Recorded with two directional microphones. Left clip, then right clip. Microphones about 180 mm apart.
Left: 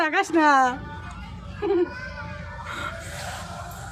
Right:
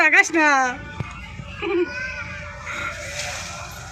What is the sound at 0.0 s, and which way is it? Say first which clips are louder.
Speech: right 5 dB; 15° left (ahead or behind).